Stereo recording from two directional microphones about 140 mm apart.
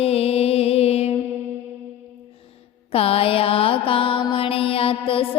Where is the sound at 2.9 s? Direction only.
45° left (ahead or behind).